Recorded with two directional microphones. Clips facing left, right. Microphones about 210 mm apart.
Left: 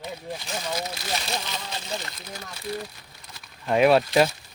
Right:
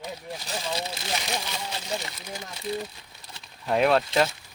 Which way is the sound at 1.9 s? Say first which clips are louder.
Right 2 dB; 10° right (ahead or behind).